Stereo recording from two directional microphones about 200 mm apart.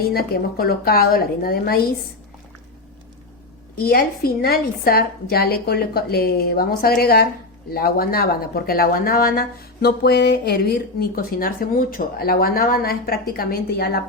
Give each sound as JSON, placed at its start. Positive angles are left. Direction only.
{"t": 0.0, "sound": "speech", "side_deg": 50}
{"t": 3.8, "sound": "speech", "side_deg": 50}